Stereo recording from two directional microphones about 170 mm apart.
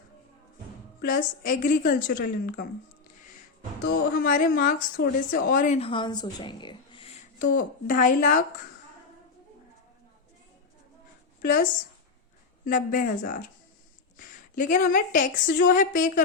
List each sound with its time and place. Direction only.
1.0 s a woman's voice: 55° left (ahead or behind)
3.8 s speech: 55° left (ahead or behind)
5.9 s a woman's voice: 25° left (ahead or behind)
7.3 s a woman's voice: 50° left (ahead or behind)
12.6 s a woman's voice: 55° left (ahead or behind)